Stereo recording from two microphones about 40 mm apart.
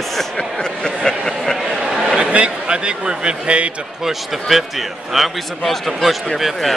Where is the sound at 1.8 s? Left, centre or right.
Centre.